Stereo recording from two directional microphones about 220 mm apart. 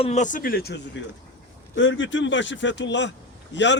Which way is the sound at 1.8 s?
55° left (ahead or behind).